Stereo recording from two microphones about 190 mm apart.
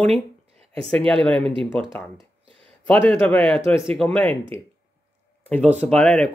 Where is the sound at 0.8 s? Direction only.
5° left (ahead or behind).